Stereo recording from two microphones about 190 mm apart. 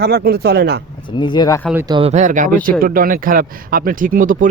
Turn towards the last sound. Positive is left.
turn(degrees=-45)  # may be behind; listen again after turning